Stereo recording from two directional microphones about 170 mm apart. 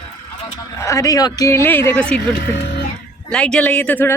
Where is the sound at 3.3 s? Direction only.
5° left (ahead or behind).